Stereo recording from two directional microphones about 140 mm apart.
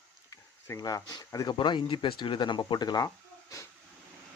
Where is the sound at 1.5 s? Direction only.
35° left (ahead or behind).